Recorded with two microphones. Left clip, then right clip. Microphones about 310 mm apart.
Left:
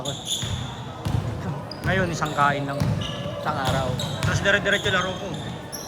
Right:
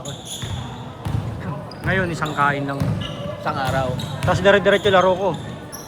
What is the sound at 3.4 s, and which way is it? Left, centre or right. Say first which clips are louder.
Basketball bounce: right 3 dB; right.